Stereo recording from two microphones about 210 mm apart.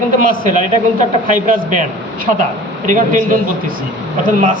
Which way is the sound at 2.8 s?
40° right (ahead or behind).